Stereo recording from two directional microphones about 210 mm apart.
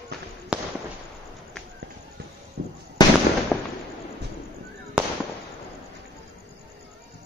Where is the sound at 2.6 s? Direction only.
60° right (ahead or behind).